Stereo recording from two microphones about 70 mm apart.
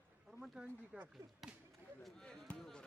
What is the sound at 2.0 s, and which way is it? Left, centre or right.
Speech, centre.